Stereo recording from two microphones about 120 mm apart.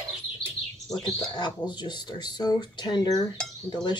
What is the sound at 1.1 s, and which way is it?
Speech, 40° left (ahead or behind).